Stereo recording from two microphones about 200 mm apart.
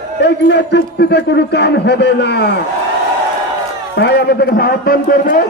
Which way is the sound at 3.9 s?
55° left (ahead or behind).